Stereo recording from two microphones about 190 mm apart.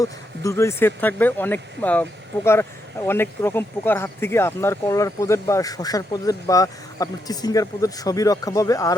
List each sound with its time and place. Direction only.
0.0 s speech: 15° left (ahead or behind)